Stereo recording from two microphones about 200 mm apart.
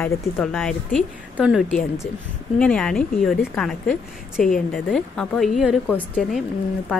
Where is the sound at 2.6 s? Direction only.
5° left (ahead or behind).